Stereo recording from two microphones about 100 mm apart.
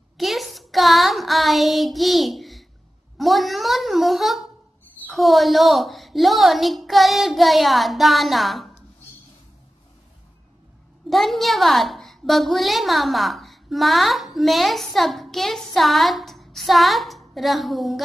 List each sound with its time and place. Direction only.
0.2 s child singing: centre (ahead or behind)
3.2 s a woman's voice: centre (ahead or behind)
11.1 s a woman's voice: centre (ahead or behind)